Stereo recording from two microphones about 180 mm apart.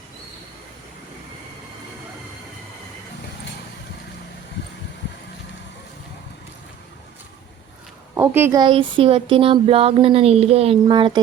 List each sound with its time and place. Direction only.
8.1 s a woman's voice: 10° right (ahead or behind)
8.6 s speech: 30° right (ahead or behind)